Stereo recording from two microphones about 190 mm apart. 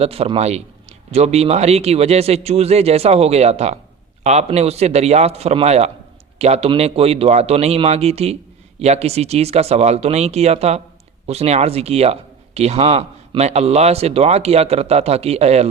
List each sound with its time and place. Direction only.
0.0 s a man's voice: 30° right (ahead or behind)